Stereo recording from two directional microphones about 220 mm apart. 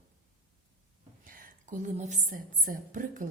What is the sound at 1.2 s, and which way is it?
A woman's voice, 40° right (ahead or behind).